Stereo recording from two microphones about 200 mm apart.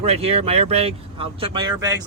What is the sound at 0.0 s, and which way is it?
Speech, 30° right (ahead or behind).